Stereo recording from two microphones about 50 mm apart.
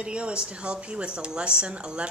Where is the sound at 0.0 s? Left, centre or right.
Right.